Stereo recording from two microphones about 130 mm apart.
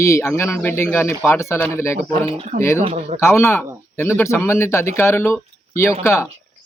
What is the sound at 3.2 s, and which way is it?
Speech, 20° left (ahead or behind).